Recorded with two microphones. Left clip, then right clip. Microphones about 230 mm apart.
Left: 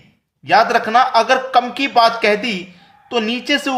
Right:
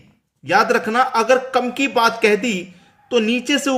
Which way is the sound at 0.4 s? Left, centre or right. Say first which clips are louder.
Left 3 dB; centre.